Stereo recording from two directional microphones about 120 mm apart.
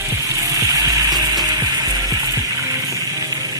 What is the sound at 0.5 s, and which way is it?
Music, 30° right (ahead or behind).